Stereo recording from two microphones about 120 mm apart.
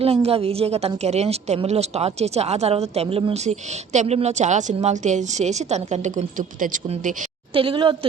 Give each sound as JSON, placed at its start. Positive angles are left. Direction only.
{"t": 0.0, "sound": "a woman's voice", "side_deg": -55}
{"t": 3.4, "sound": "a woman's voice", "side_deg": -75}
{"t": 7.5, "sound": "a woman's voice", "side_deg": -45}